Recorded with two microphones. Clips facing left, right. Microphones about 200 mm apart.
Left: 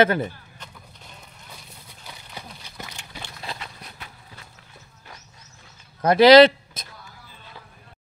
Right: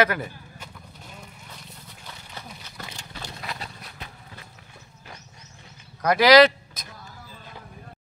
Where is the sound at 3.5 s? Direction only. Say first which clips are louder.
Left 1 dB; 30° left (ahead or behind).